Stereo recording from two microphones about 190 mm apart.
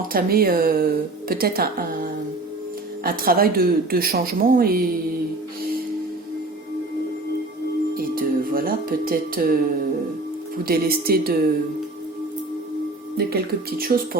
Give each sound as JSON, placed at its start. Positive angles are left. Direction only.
{"t": 0.1, "sound": "a woman's voice", "side_deg": -50}
{"t": 3.0, "sound": "a woman's voice", "side_deg": -50}
{"t": 7.9, "sound": "speech", "side_deg": -50}
{"t": 10.7, "sound": "a woman's voice", "side_deg": -55}
{"t": 13.1, "sound": "a woman's voice", "side_deg": -55}